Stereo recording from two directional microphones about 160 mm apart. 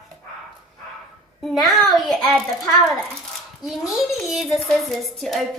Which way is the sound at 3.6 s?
Centre (ahead or behind).